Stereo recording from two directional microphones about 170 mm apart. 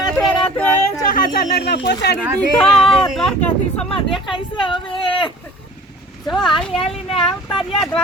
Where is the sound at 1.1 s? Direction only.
75° left (ahead or behind).